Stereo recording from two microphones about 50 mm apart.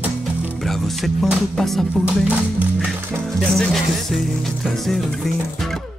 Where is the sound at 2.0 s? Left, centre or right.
Right.